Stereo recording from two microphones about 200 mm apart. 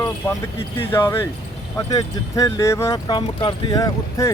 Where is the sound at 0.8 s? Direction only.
10° left (ahead or behind).